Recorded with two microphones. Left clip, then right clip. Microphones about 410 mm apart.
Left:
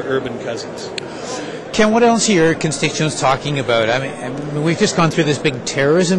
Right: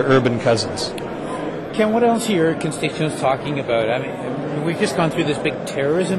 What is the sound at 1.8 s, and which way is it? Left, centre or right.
Speech, left.